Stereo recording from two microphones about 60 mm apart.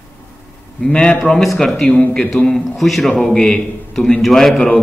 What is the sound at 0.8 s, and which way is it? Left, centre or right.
A man's voice, centre.